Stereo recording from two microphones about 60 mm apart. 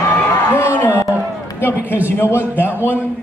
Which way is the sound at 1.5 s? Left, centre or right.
Left.